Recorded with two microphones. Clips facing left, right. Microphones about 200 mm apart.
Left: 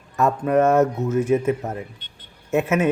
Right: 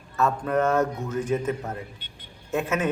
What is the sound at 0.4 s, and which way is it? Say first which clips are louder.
Speech: left 7 dB; 10° left (ahead or behind).